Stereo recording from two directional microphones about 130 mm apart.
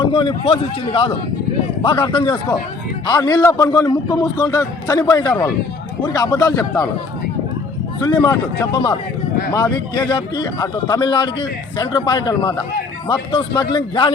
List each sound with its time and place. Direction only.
0.0 s a man's voice: 40° left (ahead or behind)
8.0 s a man's voice: 35° left (ahead or behind)